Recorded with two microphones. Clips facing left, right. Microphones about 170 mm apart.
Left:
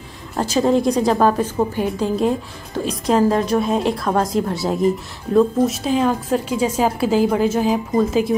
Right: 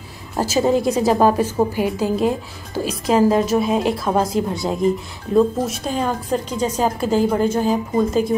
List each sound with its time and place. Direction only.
0.4 s a woman's voice: 5° right (ahead or behind)